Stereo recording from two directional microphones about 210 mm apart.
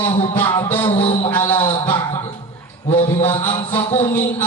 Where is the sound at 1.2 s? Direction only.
10° left (ahead or behind).